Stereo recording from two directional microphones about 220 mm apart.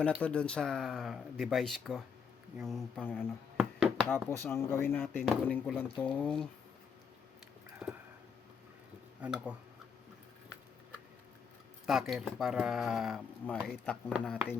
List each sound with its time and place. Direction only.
0.0 s speech: 5° left (ahead or behind)
4.3 s speech: 10° left (ahead or behind)
7.8 s a sound: 5° right (ahead or behind)
9.2 s speech: 5° right (ahead or behind)
11.9 s speech: centre (ahead or behind)